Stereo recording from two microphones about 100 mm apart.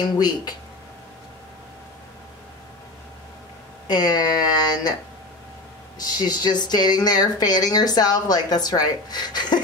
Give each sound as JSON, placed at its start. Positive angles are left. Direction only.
{"t": 0.0, "sound": "speech", "side_deg": 45}
{"t": 3.8, "sound": "speech", "side_deg": 45}
{"t": 5.9, "sound": "speech", "side_deg": 40}